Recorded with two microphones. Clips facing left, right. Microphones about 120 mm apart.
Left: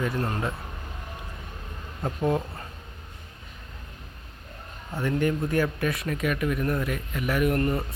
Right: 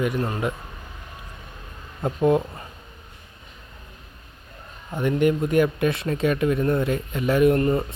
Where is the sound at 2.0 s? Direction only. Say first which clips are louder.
Right 6 dB; 20° right (ahead or behind).